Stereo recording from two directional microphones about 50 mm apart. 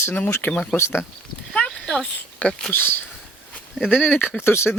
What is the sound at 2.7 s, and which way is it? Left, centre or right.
Speech, left.